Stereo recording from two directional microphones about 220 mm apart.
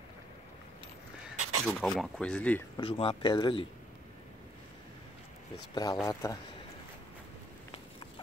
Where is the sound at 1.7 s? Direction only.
Centre (ahead or behind).